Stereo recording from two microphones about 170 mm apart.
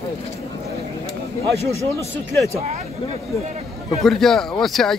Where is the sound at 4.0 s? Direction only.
Centre (ahead or behind).